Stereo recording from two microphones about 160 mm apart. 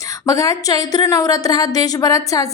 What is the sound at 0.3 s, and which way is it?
A woman's voice, 20° left (ahead or behind).